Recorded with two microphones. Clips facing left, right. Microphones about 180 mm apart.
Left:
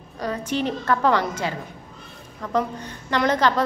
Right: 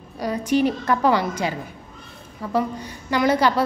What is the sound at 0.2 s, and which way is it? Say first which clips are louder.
A woman's voice: right 5 dB; 10° right (ahead or behind).